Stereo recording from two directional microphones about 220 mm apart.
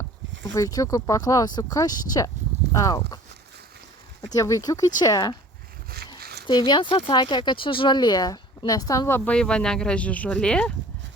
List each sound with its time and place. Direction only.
0.5 s a woman's voice: 15° left (ahead or behind)
4.4 s a woman's voice: 15° left (ahead or behind)
6.1 s a sound: 45° right (ahead or behind)
6.5 s a woman's voice: 20° left (ahead or behind)